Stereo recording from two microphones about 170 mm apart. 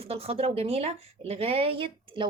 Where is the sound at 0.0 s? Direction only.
35° right (ahead or behind).